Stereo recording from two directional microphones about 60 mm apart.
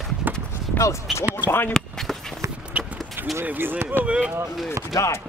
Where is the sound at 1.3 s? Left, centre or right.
Left.